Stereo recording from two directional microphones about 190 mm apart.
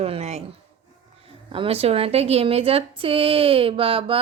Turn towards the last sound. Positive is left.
turn(degrees=-30)  # may be behind; listen again after turning